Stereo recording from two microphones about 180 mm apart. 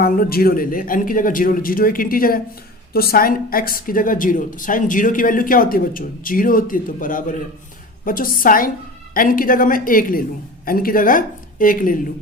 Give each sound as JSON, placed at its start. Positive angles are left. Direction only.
{"t": 0.0, "sound": "speech", "side_deg": 55}